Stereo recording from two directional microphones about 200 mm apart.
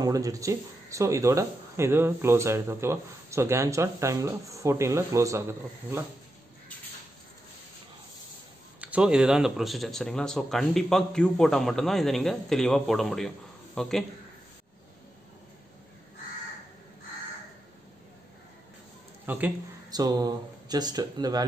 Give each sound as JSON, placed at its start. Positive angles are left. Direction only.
{"t": 0.0, "sound": "speech", "side_deg": -15}
{"t": 8.8, "sound": "speech", "side_deg": -5}
{"t": 19.2, "sound": "speech", "side_deg": -10}
{"t": 19.9, "sound": "speech", "side_deg": -20}